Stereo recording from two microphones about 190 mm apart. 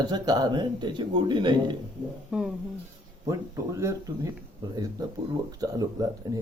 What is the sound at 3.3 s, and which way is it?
Speech, 15° right (ahead or behind).